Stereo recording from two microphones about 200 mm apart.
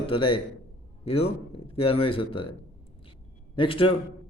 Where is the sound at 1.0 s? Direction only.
30° left (ahead or behind).